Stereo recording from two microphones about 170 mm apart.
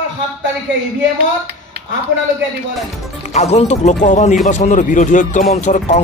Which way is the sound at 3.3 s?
40° left (ahead or behind).